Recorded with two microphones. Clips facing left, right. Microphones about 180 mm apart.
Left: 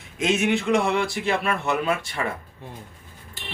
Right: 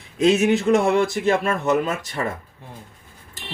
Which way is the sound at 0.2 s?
35° right (ahead or behind).